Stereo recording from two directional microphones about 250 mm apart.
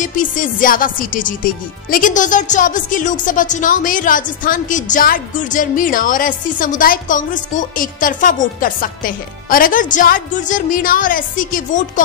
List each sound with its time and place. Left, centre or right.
0.0 s speech: left